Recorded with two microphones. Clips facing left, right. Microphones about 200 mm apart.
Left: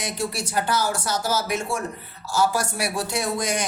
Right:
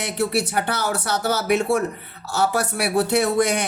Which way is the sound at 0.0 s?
65° right (ahead or behind).